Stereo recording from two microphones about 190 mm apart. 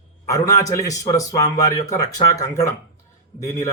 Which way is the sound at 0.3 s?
15° left (ahead or behind).